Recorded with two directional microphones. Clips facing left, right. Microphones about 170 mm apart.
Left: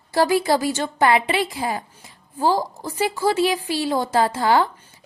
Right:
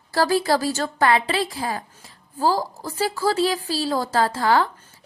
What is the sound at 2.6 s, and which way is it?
Speech, centre (ahead or behind).